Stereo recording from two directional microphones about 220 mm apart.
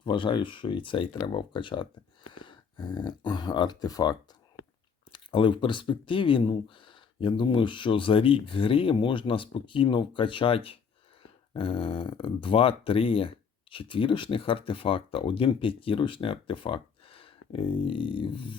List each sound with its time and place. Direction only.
0.0 s speech: 20° left (ahead or behind)